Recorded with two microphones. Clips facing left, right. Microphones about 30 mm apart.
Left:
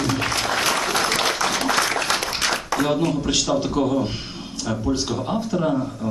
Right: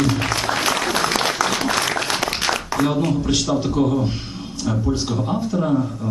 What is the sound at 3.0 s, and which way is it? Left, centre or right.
A man's voice, centre.